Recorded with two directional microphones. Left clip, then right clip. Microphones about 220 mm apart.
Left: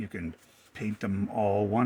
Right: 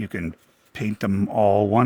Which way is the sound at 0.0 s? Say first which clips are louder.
Right 8 dB; 60° right (ahead or behind).